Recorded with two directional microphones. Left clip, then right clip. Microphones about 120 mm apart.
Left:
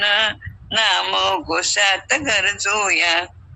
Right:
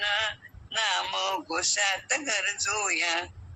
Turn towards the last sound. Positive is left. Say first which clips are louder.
# left 10 dB
turn(degrees=45)  # may be behind; listen again after turning